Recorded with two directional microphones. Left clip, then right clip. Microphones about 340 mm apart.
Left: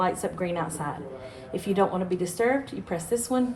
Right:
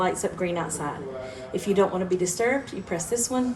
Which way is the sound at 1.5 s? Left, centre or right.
Left.